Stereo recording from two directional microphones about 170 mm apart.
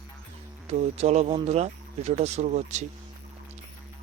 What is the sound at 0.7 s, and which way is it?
Speech, 40° right (ahead or behind).